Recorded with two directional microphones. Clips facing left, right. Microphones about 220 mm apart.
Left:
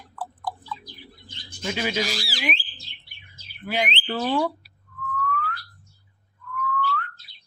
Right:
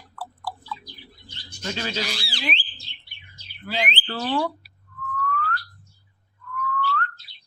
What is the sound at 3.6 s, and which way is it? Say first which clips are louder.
Speech: left 2 dB; 15° left (ahead or behind).